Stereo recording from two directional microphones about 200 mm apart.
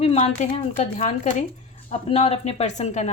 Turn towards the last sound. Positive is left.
turn(degrees=35)  # may be behind; listen again after turning